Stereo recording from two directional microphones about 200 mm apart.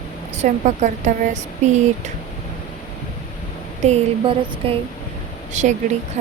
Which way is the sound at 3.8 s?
35° right (ahead or behind).